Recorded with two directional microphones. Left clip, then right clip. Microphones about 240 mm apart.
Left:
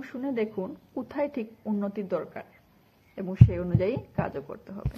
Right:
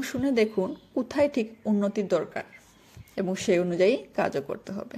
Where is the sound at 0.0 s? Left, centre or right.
Right.